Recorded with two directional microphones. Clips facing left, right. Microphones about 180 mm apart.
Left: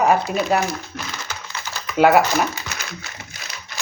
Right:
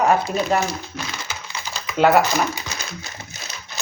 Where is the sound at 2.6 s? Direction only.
20° right (ahead or behind).